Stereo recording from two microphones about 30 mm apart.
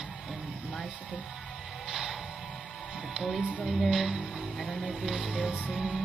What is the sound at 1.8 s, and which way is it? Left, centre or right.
Music, centre.